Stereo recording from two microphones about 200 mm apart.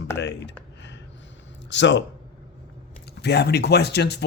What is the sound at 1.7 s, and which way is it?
Speech, 60° left (ahead or behind).